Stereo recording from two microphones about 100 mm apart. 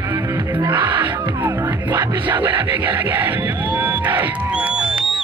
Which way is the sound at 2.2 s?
20° right (ahead or behind).